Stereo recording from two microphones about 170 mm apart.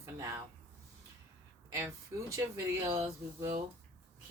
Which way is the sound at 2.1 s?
15° right (ahead or behind).